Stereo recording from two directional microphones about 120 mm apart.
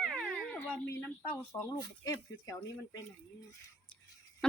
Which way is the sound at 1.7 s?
30° left (ahead or behind).